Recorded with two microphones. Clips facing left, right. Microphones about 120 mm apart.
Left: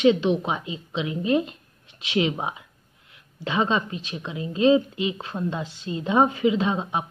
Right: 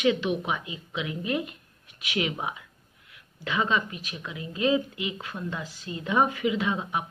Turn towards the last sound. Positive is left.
turn(degrees=25)  # may be behind; listen again after turning